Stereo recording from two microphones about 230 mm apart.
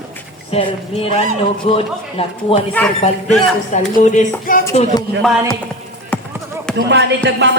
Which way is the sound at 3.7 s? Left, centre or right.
Left.